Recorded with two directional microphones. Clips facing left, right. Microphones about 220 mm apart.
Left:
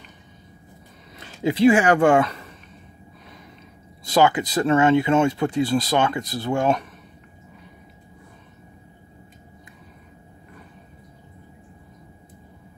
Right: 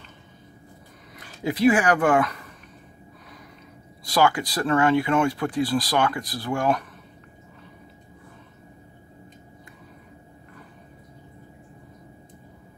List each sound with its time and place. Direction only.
1.1 s speech: 25° left (ahead or behind)
4.0 s speech: 20° left (ahead or behind)